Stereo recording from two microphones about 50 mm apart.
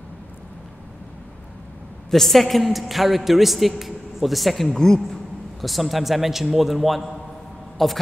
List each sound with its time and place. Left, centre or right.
2.0 s a woman's voice: centre
5.6 s a woman's voice: centre